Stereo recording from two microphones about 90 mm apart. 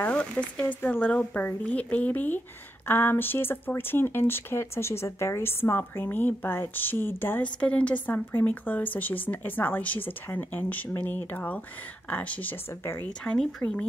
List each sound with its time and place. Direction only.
0.0 s speech: 15° left (ahead or behind)
13.0 s speech: 10° left (ahead or behind)